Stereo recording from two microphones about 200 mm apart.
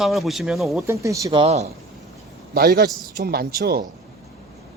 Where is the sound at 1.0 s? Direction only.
15° right (ahead or behind).